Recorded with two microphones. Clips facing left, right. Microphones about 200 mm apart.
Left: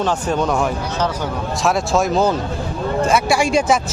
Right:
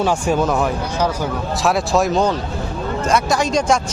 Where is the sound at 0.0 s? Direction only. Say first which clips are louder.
Right 2 dB; 10° right (ahead or behind).